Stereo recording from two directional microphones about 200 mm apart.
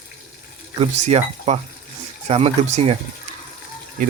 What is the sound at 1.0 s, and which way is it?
Speech, 35° right (ahead or behind).